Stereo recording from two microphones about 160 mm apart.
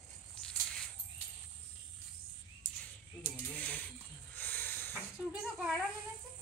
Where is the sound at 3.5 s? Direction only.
10° left (ahead or behind).